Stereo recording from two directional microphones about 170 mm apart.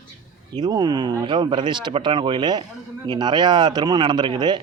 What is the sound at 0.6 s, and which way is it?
Speech, 20° right (ahead or behind).